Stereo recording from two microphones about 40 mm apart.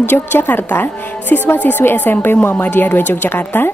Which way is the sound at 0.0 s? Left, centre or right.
Left.